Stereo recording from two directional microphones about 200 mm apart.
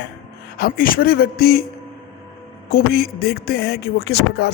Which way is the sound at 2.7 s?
50° left (ahead or behind).